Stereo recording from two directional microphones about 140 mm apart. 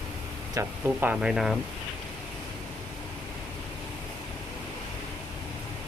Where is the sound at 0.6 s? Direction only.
20° right (ahead or behind).